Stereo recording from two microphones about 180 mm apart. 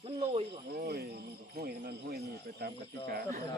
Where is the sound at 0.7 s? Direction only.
60° right (ahead or behind).